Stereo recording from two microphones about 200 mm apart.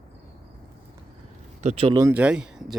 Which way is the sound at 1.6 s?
30° right (ahead or behind).